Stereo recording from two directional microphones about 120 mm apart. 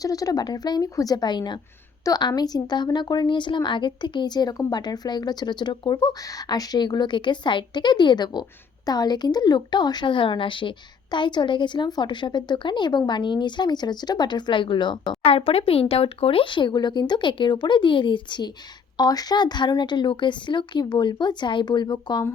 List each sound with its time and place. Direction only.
0.0 s a woman's voice: 30° left (ahead or behind)